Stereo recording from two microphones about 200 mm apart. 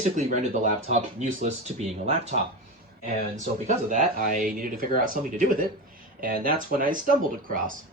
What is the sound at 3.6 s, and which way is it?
Speech, 40° right (ahead or behind).